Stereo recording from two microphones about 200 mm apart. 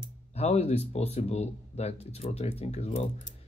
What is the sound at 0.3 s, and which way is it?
Speech, 30° left (ahead or behind).